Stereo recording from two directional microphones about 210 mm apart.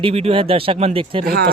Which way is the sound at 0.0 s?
30° right (ahead or behind).